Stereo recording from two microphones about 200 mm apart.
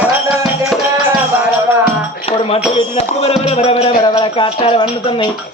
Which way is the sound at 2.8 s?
30° left (ahead or behind).